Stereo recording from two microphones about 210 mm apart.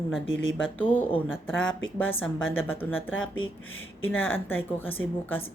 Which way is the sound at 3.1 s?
70° left (ahead or behind).